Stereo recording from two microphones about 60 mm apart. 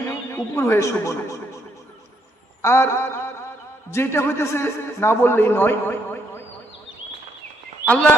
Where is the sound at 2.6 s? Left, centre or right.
Left.